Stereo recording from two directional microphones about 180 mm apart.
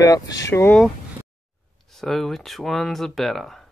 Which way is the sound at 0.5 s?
15° left (ahead or behind).